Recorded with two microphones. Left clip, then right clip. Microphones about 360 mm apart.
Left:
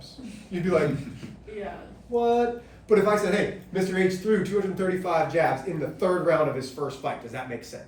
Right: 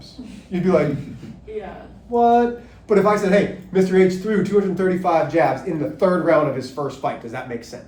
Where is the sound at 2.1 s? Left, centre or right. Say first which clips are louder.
Right 7 dB; centre.